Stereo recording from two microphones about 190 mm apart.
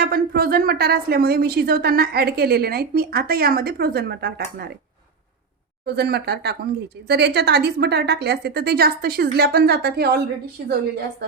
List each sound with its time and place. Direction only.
0.0 s a woman's voice: 55° right (ahead or behind)
5.8 s a woman's voice: 60° right (ahead or behind)